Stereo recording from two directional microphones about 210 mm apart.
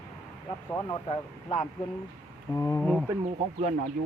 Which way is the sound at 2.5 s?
10° left (ahead or behind).